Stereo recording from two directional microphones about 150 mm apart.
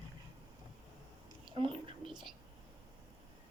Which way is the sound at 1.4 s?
35° right (ahead or behind).